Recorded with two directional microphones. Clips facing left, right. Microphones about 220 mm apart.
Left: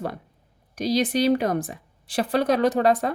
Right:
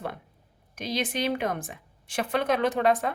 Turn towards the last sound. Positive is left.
turn(degrees=35)  # may be behind; listen again after turning